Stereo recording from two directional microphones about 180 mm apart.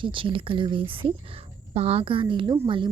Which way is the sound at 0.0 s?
30° right (ahead or behind).